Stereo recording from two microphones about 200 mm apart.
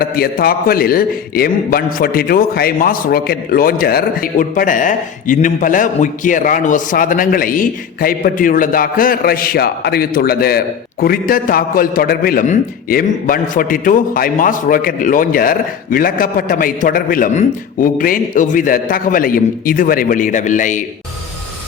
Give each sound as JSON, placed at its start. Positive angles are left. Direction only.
{"t": 0.0, "sound": "a man's voice", "side_deg": 50}